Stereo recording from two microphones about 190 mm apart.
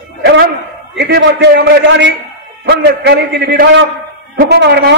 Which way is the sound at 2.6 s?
60° right (ahead or behind).